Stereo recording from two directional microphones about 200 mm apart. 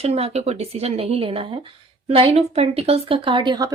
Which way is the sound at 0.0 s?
30° right (ahead or behind).